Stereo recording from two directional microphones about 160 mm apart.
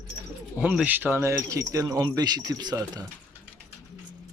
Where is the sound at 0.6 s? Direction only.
10° right (ahead or behind); by 3.1 s 25° right (ahead or behind).